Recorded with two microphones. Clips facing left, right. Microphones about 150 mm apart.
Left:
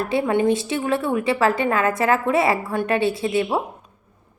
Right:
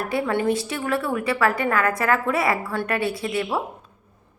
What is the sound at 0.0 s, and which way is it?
A woman's voice, 25° left (ahead or behind).